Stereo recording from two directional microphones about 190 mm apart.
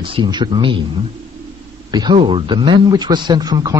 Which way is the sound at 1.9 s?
20° right (ahead or behind).